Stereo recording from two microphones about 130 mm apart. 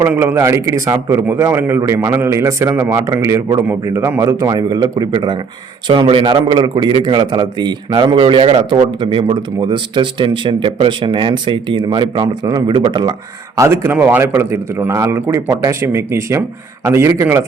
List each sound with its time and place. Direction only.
0.0 s a man's voice: 15° right (ahead or behind); by 13.1 s 35° right (ahead or behind)
13.6 s a man's voice: 20° right (ahead or behind)